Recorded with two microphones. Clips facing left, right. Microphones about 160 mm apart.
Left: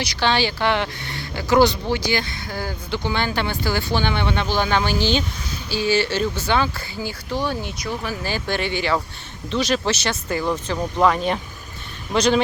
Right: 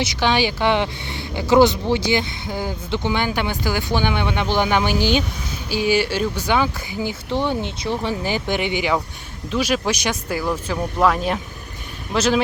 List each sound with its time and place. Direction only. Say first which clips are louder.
0.0 s speech: right 2 dB; 20° right (ahead or behind)